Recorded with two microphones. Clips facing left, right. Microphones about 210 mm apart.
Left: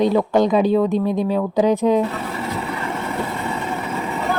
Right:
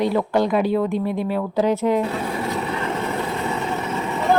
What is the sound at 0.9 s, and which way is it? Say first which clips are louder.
Speech: left 3 dB; 10° right (ahead or behind).